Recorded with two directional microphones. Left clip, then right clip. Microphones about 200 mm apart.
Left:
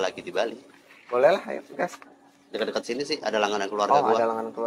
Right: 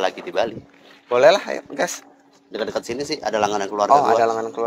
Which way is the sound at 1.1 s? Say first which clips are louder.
Right 6 dB; 60° right (ahead or behind).